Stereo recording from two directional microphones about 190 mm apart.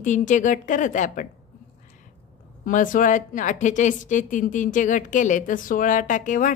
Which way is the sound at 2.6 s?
45° left (ahead or behind).